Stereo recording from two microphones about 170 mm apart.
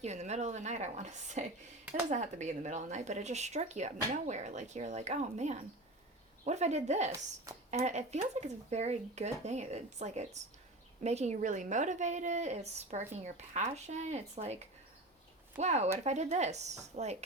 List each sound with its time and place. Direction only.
0.0 s speech: 40° right (ahead or behind)